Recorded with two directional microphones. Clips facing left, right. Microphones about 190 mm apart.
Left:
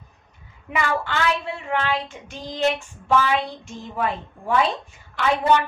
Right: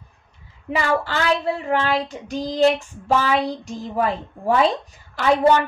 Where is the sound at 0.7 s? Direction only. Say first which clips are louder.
Right 2 dB; 35° right (ahead or behind).